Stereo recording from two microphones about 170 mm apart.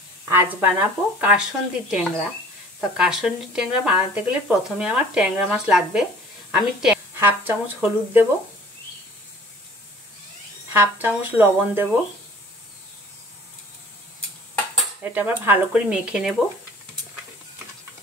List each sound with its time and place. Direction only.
0.2 s speech: 15° right (ahead or behind)
10.7 s speech: 10° right (ahead or behind)
15.1 s speech: 10° right (ahead or behind)